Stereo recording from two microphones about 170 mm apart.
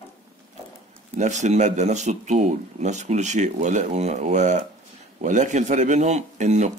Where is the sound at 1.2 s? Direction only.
45° right (ahead or behind).